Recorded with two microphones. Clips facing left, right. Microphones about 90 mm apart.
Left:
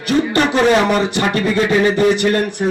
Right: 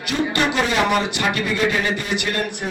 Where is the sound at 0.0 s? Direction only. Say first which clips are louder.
Left 6 dB; 35° left (ahead or behind).